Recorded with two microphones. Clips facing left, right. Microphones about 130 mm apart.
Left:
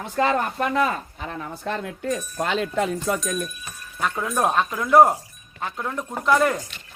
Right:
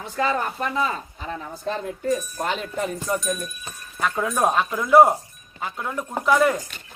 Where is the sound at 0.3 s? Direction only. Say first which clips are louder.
Left 2 dB; 65° left (ahead or behind).